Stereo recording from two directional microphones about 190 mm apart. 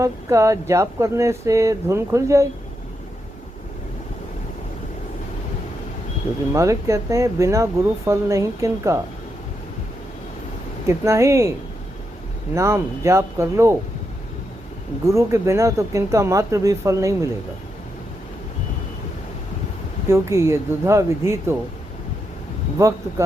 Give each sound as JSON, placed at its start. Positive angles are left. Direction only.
{"t": 0.0, "sound": "speech", "side_deg": -15}
{"t": 6.5, "sound": "speech", "side_deg": -15}
{"t": 10.8, "sound": "speech", "side_deg": -15}
{"t": 12.5, "sound": "speech", "side_deg": -15}
{"t": 15.0, "sound": "speech", "side_deg": -15}
{"t": 20.1, "sound": "speech", "side_deg": -15}
{"t": 22.8, "sound": "speech", "side_deg": -15}